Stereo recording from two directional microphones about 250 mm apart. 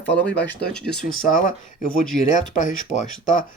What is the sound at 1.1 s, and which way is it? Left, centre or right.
Speech, left.